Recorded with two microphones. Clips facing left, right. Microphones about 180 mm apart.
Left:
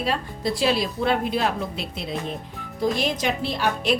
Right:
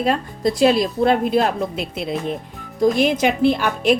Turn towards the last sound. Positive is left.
turn(degrees=-50)  # may be behind; listen again after turning